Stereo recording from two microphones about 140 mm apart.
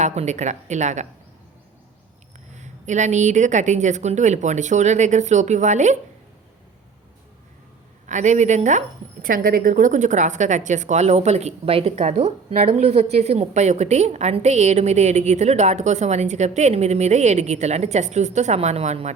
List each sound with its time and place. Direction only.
0.0 s a woman's voice: 55° right (ahead or behind)
2.6 s a woman's voice: 60° right (ahead or behind)
8.0 s a woman's voice: 60° right (ahead or behind)
9.2 s speech: 85° right; by 19.1 s 50° right (ahead or behind)